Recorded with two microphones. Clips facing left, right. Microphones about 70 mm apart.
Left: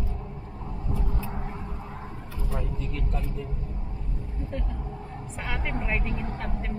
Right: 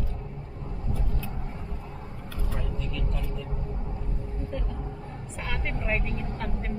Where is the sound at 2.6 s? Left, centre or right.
Left.